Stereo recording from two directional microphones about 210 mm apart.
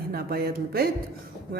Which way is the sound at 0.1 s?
45° right (ahead or behind).